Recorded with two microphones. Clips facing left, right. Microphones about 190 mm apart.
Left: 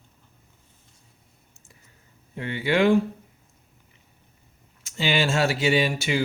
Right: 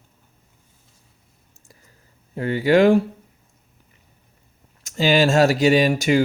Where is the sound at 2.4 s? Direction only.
40° right (ahead or behind).